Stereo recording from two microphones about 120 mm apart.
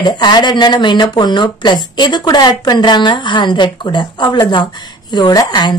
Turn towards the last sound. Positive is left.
turn(degrees=35)  # may be behind; listen again after turning